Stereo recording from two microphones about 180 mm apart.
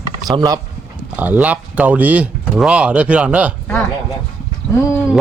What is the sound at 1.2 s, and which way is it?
Speech, 10° right (ahead or behind).